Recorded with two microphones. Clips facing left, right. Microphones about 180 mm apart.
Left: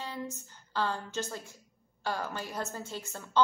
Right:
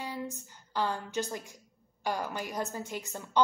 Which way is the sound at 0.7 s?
15° right (ahead or behind).